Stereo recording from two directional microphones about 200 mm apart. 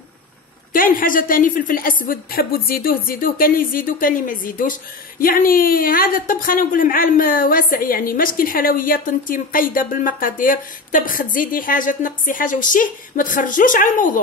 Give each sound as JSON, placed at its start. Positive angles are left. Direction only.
{"t": 0.7, "sound": "a woman's voice", "side_deg": 45}